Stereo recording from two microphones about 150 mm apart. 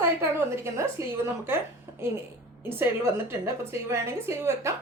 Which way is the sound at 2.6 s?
15° right (ahead or behind).